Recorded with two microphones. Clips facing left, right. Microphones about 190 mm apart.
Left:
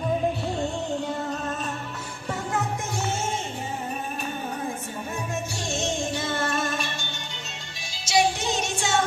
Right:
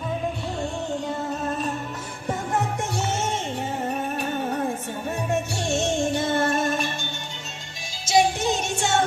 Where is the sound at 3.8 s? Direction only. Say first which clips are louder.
Right 5 dB; 70° right (ahead or behind); by 6.8 s 50° right (ahead or behind).